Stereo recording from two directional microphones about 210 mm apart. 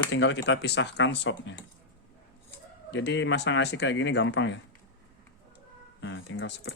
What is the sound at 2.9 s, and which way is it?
Speech, 60° left (ahead or behind).